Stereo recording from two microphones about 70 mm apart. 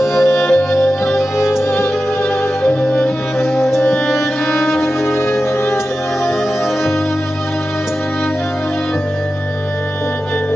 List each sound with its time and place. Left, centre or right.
0.0 s music: centre
1.4 s music: left
3.0 s music: left
5.0 s music: left